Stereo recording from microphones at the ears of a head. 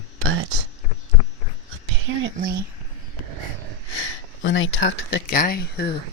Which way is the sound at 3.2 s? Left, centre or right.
Right.